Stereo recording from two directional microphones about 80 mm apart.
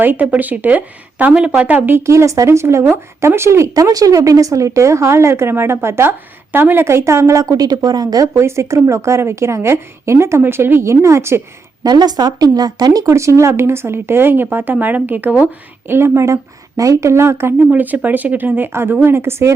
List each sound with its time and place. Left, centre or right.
0.0 s speech: right
1.3 s speech: centre
2.0 s speech: right
3.8 s speech: right
7.5 s a woman's voice: right
8.4 s speech: right
11.8 s speech: right
13.1 s speech: right
17.7 s speech: centre